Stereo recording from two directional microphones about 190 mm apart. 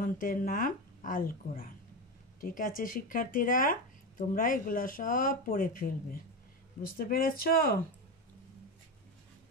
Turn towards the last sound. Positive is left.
turn(degrees=55)  # may be behind; listen again after turning